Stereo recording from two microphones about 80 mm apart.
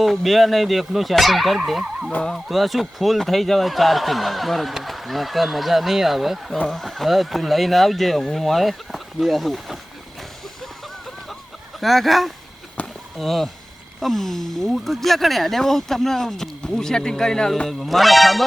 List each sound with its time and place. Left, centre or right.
0.0 s speech: centre
10.2 s vehicle: centre
11.8 s speech: centre
12.8 s a sound: centre
13.1 s speech: centre